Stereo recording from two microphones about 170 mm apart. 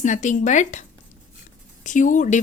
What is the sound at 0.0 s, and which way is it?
Speech, 45° left (ahead or behind).